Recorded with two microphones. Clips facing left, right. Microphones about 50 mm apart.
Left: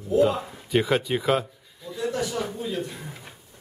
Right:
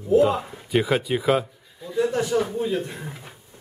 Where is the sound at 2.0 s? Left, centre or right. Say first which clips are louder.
Right 5 dB; right.